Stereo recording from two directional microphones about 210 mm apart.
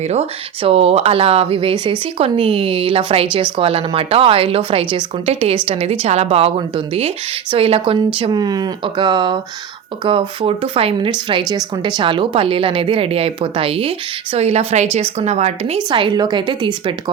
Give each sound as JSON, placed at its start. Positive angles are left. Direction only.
{"t": 0.0, "sound": "a woman's voice", "side_deg": -30}